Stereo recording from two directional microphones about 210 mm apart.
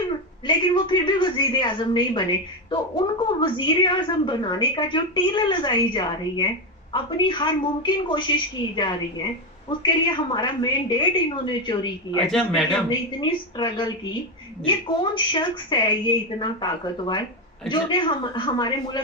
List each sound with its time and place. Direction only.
0.4 s a woman's voice: 20° left (ahead or behind)
12.3 s a man's voice: centre (ahead or behind)
12.9 s a woman's voice: 20° left (ahead or behind)